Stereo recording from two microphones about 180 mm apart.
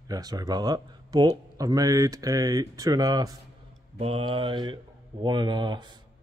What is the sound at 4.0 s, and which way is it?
Speech, 30° right (ahead or behind).